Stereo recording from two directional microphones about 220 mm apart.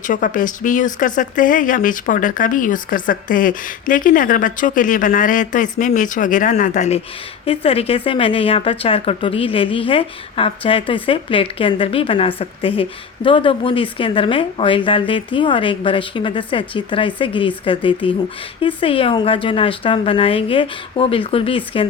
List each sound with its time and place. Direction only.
0.0 s speech: 35° left (ahead or behind)